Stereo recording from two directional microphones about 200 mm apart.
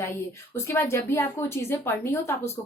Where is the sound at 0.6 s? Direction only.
15° left (ahead or behind).